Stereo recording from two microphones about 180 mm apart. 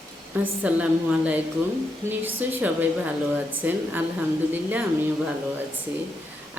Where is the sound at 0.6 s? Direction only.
10° right (ahead or behind).